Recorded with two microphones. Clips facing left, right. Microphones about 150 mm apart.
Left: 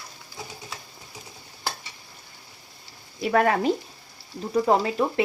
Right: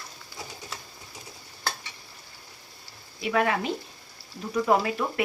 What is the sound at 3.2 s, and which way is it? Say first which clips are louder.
Speech: left 4 dB; 40° left (ahead or behind).